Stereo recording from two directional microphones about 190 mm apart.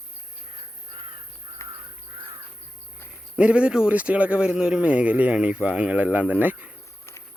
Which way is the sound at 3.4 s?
5° right (ahead or behind).